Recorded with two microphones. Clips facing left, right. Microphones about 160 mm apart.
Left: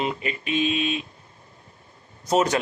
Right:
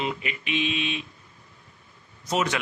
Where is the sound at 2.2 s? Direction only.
40° left (ahead or behind).